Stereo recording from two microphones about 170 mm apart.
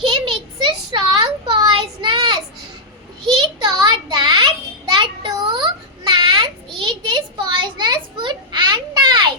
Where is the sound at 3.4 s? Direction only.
25° right (ahead or behind).